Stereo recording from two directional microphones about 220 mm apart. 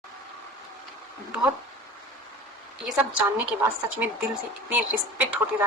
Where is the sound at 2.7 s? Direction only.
Centre (ahead or behind).